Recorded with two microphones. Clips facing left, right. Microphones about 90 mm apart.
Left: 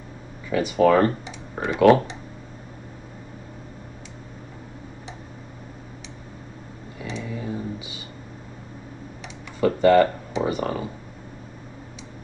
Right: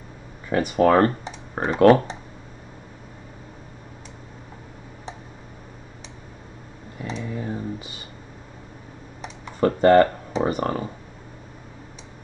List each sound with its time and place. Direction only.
0.5 s speech: 45° right (ahead or behind)
7.0 s a sound: 40° right (ahead or behind)
9.2 s computer keyboard: 40° right (ahead or behind)